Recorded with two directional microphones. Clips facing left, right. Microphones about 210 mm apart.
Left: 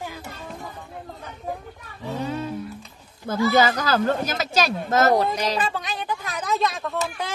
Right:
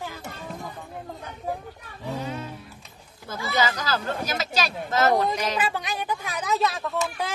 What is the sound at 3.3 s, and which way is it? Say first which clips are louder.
Speech: left 7 dB; 50° left (ahead or behind).